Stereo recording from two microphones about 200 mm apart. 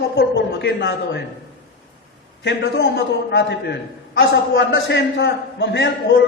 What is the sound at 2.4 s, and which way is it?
A man's voice, 60° left (ahead or behind).